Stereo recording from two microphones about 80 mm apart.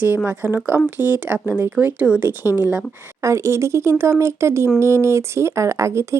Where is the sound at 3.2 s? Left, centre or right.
Right.